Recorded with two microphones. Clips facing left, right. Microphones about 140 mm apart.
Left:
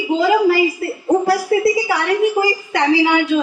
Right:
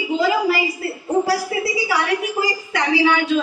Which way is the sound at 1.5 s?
45° left (ahead or behind).